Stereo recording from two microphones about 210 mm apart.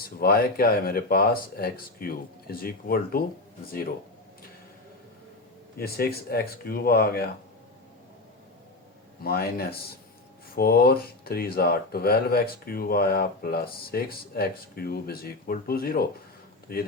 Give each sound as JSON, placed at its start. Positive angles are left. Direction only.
{"t": 0.0, "sound": "speech", "side_deg": 45}
{"t": 5.8, "sound": "speech", "side_deg": 45}
{"t": 9.2, "sound": "speech", "side_deg": 45}